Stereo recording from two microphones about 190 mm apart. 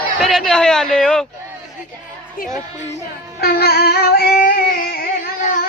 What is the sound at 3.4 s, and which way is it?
Music, 55° left (ahead or behind).